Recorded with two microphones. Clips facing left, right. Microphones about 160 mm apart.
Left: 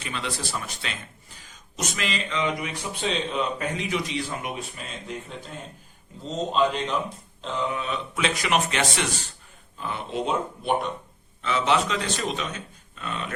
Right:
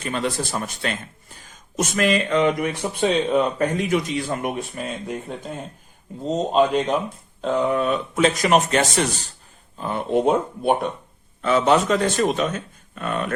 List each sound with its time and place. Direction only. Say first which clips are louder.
0.0 s a man's voice: right 7 dB; 45° right (ahead or behind)